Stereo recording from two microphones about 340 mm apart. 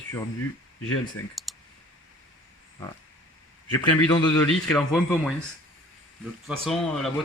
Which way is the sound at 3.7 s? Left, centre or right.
Centre.